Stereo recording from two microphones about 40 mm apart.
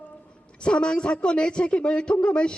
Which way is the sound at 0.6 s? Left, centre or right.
Left.